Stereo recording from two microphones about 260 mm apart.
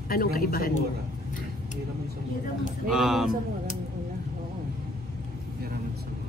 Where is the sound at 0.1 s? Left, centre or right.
Left.